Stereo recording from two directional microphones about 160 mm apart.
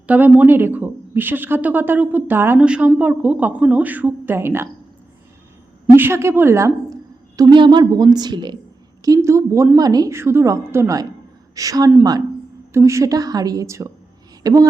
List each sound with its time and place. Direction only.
0.1 s speech: 10° right (ahead or behind)
5.9 s a woman's voice: 15° right (ahead or behind)